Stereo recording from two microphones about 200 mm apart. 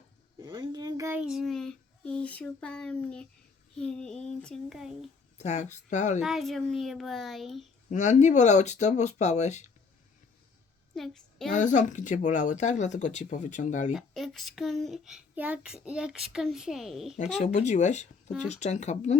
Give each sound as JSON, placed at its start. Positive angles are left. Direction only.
{"t": 0.4, "sound": "a sound", "side_deg": -20}
{"t": 1.2, "sound": "speech", "side_deg": 0}
{"t": 5.4, "sound": "speech", "side_deg": 35}
{"t": 6.2, "sound": "speech", "side_deg": 0}
{"t": 7.9, "sound": "speech", "side_deg": 35}
{"t": 10.9, "sound": "a woman's voice", "side_deg": 0}
{"t": 11.5, "sound": "speech", "side_deg": 40}
{"t": 13.9, "sound": "speech", "side_deg": 0}
{"t": 17.2, "sound": "speech", "side_deg": 35}